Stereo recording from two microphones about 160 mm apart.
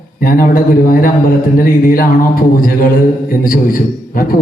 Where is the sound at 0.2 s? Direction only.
65° left (ahead or behind).